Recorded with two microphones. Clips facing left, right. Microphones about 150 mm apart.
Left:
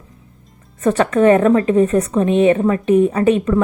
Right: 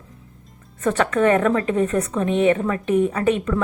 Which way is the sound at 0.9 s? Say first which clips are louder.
Left 5 dB; 30° left (ahead or behind).